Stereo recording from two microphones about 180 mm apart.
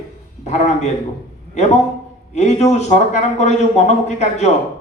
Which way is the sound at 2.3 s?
40° left (ahead or behind).